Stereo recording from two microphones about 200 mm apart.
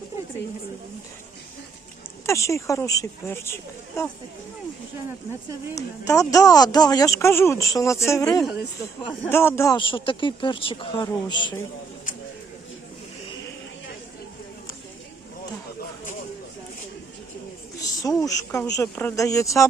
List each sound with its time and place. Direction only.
2.2 s speech: 15° left (ahead or behind)
5.7 s speech: 15° left (ahead or behind)
17.7 s a sound: 15° left (ahead or behind)
18.2 s speech: 15° left (ahead or behind)